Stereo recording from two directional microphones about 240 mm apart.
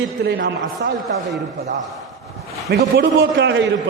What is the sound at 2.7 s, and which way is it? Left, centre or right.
Speech, right.